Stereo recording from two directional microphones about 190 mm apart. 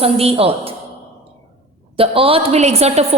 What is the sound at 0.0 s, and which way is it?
Speech, 30° right (ahead or behind).